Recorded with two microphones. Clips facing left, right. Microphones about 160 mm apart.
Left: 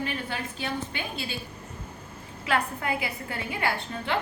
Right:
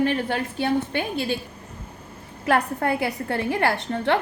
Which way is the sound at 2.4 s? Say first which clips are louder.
Right 6 dB; 50° right (ahead or behind).